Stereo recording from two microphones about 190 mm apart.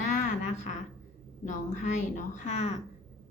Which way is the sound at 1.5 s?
40° left (ahead or behind).